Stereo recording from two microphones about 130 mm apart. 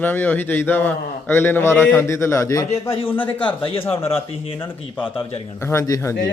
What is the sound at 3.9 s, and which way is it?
Speech, 45° left (ahead or behind).